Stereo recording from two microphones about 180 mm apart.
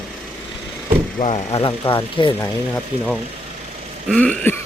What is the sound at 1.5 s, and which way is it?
Speech, 30° left (ahead or behind).